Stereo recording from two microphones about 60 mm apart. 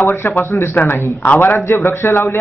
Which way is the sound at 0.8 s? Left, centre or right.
Left.